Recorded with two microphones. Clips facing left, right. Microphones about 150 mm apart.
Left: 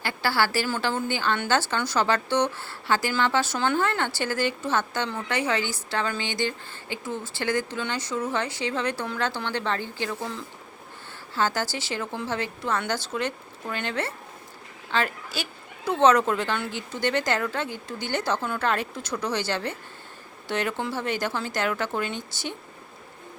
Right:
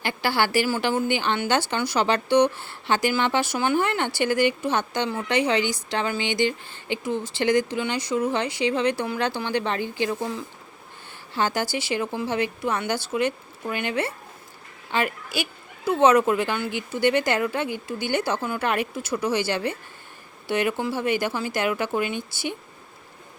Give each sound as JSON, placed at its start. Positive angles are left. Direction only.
{"t": 0.0, "sound": "a woman's voice", "side_deg": -20}